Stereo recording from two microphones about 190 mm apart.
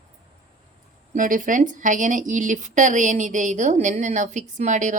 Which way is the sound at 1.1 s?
45° right (ahead or behind).